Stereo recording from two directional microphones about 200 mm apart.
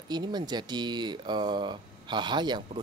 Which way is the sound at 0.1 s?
20° right (ahead or behind).